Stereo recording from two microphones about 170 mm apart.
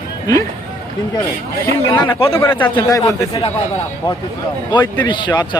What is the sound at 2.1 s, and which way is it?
Speech, 35° left (ahead or behind).